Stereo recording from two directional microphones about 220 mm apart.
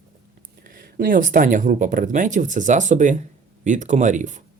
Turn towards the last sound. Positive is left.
turn(degrees=-35)  # may be behind; listen again after turning